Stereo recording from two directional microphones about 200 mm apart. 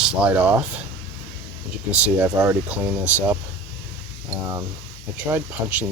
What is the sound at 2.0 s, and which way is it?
Speech, 10° right (ahead or behind).